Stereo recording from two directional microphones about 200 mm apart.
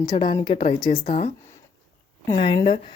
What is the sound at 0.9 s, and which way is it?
Speech, 35° left (ahead or behind).